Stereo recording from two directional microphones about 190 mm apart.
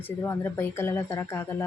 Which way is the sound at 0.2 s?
10° left (ahead or behind).